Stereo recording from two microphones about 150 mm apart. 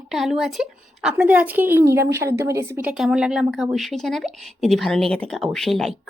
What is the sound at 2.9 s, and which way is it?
A woman's voice, 5° right (ahead or behind).